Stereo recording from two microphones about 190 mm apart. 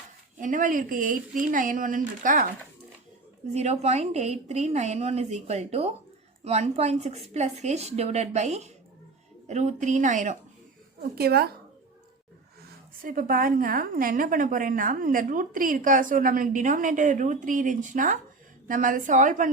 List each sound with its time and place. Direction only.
0.3 s a woman's voice: 40° right (ahead or behind)
3.5 s a woman's voice: 35° right (ahead or behind)
11.1 s speech: 55° right (ahead or behind)
13.0 s a woman's voice: 45° right (ahead or behind)